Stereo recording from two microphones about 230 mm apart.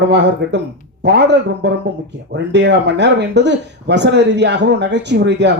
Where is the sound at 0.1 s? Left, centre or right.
Right.